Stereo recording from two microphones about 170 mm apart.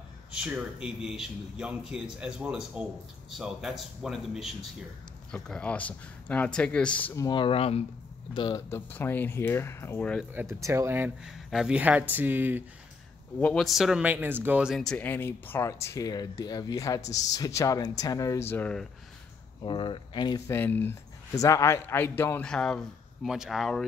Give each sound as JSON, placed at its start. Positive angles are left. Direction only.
{"t": 0.3, "sound": "speech", "side_deg": -5}
{"t": 7.2, "sound": "speech", "side_deg": 30}
{"t": 8.4, "sound": "speech", "side_deg": 20}
{"t": 10.3, "sound": "speech", "side_deg": -15}
{"t": 11.2, "sound": "speech", "side_deg": 0}
{"t": 13.4, "sound": "speech", "side_deg": 5}
{"t": 19.6, "sound": "speech", "side_deg": 30}